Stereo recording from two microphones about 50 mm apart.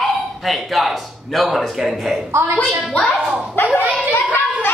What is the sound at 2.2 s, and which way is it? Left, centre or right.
Speech, right.